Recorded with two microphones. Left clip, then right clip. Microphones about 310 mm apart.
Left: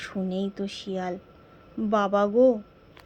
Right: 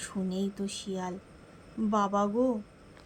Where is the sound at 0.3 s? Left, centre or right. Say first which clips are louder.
Left 4 dB; left.